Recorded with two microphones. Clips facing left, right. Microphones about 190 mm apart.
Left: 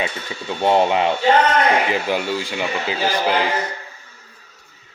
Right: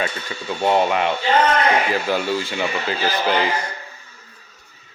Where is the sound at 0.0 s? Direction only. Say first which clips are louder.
Even; 25° left (ahead or behind).